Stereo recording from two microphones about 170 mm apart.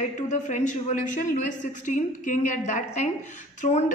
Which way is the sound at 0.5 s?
45° left (ahead or behind).